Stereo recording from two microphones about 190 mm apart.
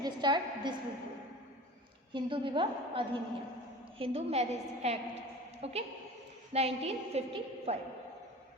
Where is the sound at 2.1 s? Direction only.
25° right (ahead or behind).